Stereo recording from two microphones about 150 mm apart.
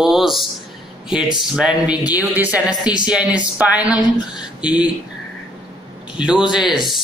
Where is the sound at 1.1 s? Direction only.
5° right (ahead or behind).